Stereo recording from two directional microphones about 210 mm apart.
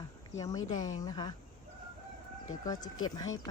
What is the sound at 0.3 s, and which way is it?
Speech, 15° left (ahead or behind).